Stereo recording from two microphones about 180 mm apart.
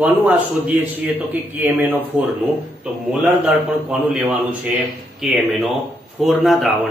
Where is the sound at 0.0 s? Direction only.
10° right (ahead or behind).